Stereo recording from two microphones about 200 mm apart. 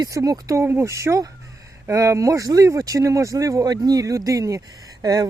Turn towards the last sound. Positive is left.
turn(degrees=-20)  # may be behind; listen again after turning